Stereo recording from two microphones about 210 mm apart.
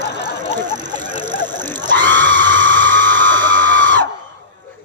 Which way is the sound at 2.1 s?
60° right (ahead or behind).